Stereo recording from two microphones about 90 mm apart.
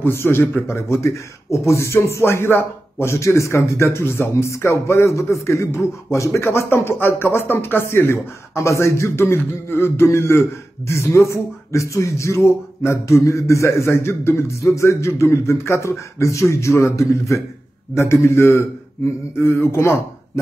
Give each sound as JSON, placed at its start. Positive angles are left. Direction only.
{"t": 0.0, "sound": "a man's voice", "side_deg": 25}